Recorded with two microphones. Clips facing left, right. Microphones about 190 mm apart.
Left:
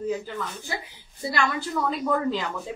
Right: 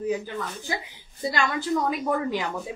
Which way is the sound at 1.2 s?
20° right (ahead or behind).